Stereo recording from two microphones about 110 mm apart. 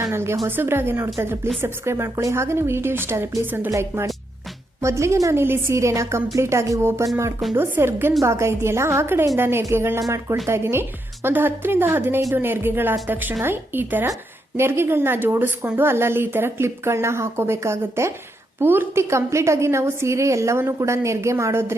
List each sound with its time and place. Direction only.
0.0 s a woman's voice: 25° right (ahead or behind)
3.7 s a woman's voice: 30° right (ahead or behind)